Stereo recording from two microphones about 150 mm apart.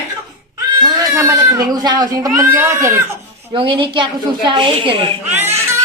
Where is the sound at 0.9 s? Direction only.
20° right (ahead or behind).